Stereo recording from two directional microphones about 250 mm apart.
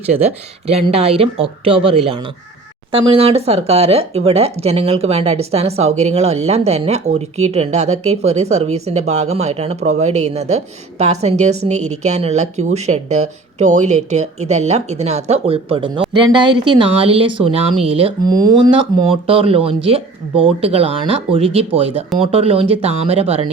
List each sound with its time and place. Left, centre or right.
0.7 s speech: right
3.1 s speech: right